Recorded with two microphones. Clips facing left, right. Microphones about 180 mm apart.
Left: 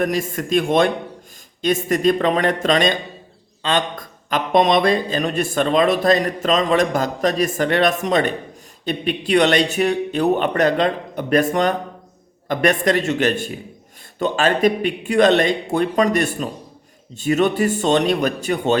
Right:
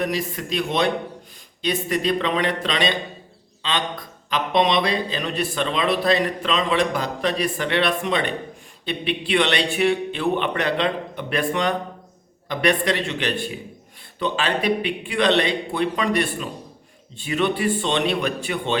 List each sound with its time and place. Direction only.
0.0 s a man's voice: 50° left (ahead or behind)